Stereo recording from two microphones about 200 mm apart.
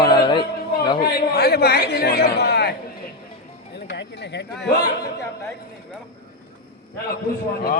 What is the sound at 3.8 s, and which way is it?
Speech, 55° left (ahead or behind).